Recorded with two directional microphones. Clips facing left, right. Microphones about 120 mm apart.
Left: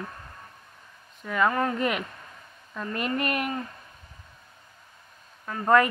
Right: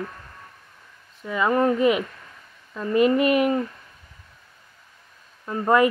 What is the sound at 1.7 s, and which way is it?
Speech, 5° right (ahead or behind).